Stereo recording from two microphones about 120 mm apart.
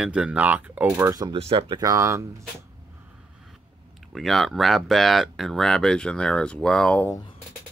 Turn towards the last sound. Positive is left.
turn(degrees=10)  # may be behind; listen again after turning